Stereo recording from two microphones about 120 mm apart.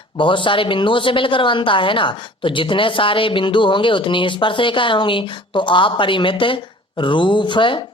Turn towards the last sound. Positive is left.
turn(degrees=45)  # may be behind; listen again after turning